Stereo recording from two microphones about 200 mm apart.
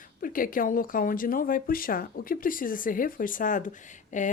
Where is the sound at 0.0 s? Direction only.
45° left (ahead or behind).